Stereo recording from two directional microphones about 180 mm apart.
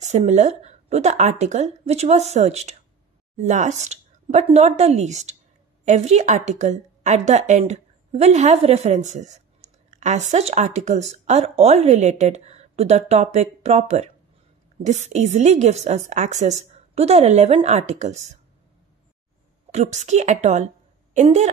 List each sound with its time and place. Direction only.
0.0 s a woman's voice: 40° right (ahead or behind)
19.7 s a woman's voice: 40° right (ahead or behind)